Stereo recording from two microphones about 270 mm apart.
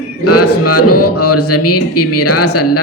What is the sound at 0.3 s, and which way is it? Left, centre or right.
Speech, left.